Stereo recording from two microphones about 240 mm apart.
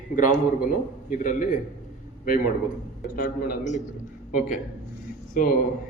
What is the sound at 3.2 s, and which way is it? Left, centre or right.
Speech, left.